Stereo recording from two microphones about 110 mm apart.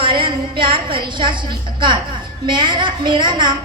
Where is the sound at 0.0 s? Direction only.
50° right (ahead or behind).